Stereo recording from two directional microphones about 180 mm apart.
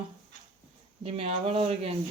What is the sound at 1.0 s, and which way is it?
Speech, 35° right (ahead or behind).